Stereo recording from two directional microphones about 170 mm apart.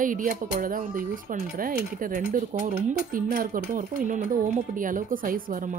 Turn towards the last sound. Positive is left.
turn(degrees=-55)  # may be behind; listen again after turning